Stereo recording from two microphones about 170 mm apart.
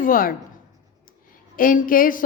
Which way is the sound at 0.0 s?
55° left (ahead or behind).